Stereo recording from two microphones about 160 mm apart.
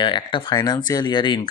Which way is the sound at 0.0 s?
30° left (ahead or behind).